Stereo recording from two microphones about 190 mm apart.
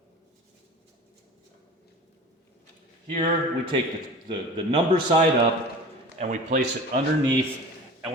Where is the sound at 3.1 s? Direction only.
25° right (ahead or behind).